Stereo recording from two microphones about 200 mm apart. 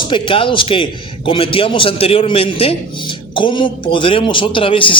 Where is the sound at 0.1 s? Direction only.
25° left (ahead or behind).